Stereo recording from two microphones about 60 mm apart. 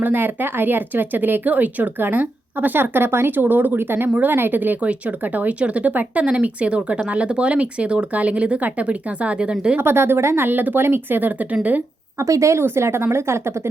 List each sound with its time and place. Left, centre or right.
0.0 s speech: right
4.8 s speech: right
9.7 s speech: right
10.8 s a woman's voice: right
11.2 s speech: right
12.2 s a woman's voice: right